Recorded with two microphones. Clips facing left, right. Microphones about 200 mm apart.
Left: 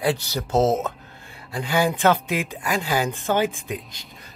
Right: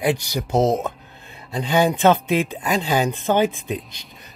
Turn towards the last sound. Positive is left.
turn(degrees=-20)  # may be behind; listen again after turning